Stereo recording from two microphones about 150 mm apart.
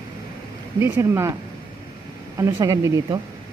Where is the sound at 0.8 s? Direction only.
20° right (ahead or behind).